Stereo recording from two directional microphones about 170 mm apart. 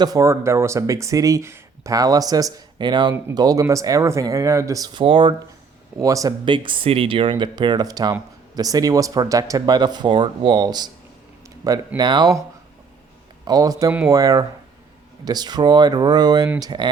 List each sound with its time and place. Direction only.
0.0 s speech: 20° right (ahead or behind)
6.0 s speech: 20° right (ahead or behind)
13.4 s speech: 20° right (ahead or behind)